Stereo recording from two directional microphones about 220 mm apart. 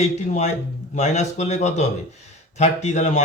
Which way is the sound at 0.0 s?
30° left (ahead or behind).